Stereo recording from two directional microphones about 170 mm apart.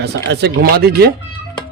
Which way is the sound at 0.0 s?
75° right (ahead or behind).